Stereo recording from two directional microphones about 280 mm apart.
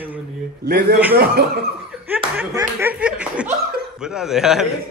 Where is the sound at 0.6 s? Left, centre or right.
Right.